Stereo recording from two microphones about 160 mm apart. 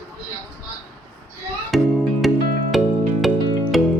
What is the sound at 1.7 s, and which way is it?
Music, centre (ahead or behind).